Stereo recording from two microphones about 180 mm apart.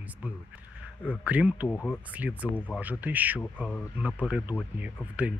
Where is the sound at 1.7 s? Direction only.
10° left (ahead or behind).